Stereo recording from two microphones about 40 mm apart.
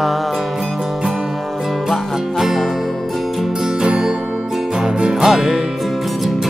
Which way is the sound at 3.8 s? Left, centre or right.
Centre.